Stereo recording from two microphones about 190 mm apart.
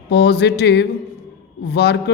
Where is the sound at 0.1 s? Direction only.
65° left (ahead or behind).